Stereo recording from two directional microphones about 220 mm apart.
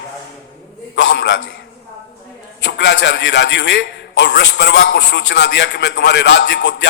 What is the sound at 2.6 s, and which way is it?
A man's voice, 55° left (ahead or behind).